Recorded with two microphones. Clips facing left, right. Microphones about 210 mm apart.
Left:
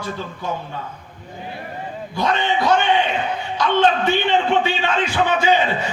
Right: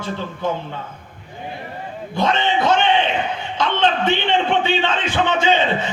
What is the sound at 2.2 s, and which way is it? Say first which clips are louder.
Music: right 1 dB; 25° right (ahead or behind).